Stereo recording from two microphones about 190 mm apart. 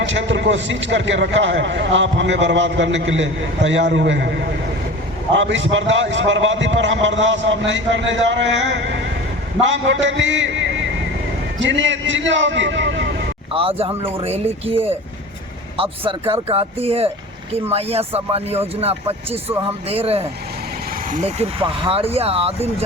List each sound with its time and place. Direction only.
0.0 s a man's voice: 75° right (ahead or behind)
5.3 s a man's voice: 75° right (ahead or behind)
13.5 s speech: 30° right (ahead or behind)